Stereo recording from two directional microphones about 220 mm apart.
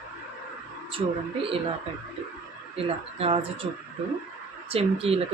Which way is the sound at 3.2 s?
25° right (ahead or behind).